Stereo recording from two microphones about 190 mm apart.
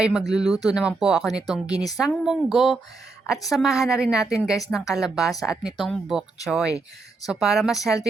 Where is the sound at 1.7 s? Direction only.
20° left (ahead or behind).